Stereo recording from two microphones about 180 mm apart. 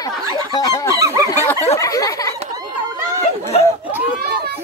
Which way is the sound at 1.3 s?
10° left (ahead or behind).